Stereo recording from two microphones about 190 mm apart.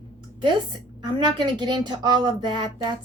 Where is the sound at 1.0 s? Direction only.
20° right (ahead or behind).